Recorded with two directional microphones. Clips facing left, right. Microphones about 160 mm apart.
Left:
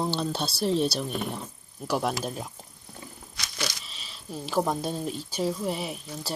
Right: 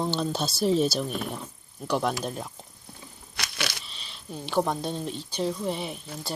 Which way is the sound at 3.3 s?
65° right (ahead or behind).